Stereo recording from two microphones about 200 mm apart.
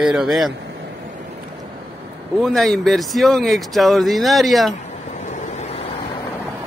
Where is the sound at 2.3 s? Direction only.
Centre (ahead or behind).